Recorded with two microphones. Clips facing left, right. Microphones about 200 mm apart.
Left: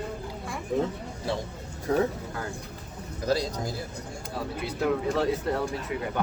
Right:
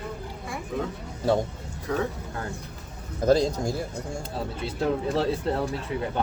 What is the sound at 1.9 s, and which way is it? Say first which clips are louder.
Speech: left 3 dB; 30° left (ahead or behind).